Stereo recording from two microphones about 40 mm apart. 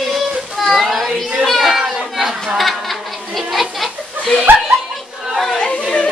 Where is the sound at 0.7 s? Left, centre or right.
Centre.